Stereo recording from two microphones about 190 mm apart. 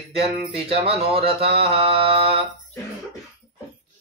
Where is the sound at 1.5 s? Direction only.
30° right (ahead or behind).